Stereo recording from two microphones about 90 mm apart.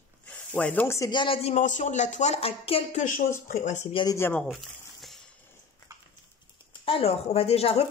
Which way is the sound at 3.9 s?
75° left (ahead or behind).